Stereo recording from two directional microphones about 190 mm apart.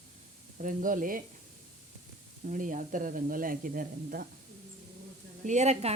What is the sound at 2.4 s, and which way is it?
Speech, 45° right (ahead or behind).